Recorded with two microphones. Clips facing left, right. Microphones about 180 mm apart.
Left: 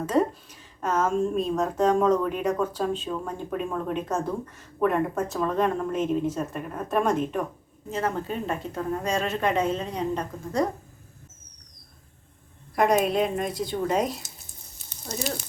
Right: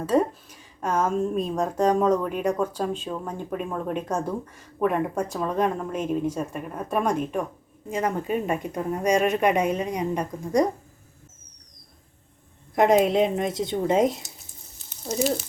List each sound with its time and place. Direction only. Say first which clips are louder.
0.0 s a woman's voice: right 1 dB; 10° right (ahead or behind)
12.7 s speech: right 3 dB; 25° right (ahead or behind)